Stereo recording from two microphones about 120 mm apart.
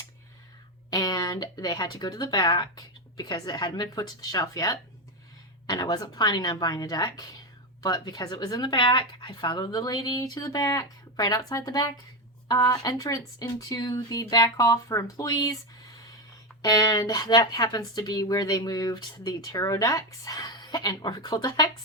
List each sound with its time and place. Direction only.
0.9 s speech: 35° left (ahead or behind)
16.6 s speech: 35° left (ahead or behind)